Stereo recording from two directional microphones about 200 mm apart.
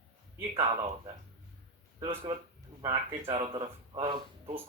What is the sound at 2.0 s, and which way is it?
Speech, 25° right (ahead or behind).